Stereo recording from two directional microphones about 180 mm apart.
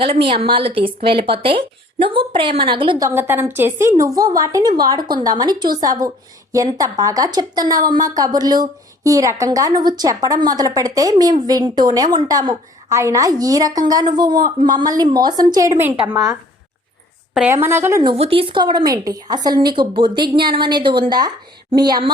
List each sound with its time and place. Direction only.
0.0 s a woman's voice: 30° right (ahead or behind)
3.2 s a woman's voice: 10° right (ahead or behind)
17.3 s a woman's voice: 10° right (ahead or behind)
18.0 s a woman's voice: 30° right (ahead or behind)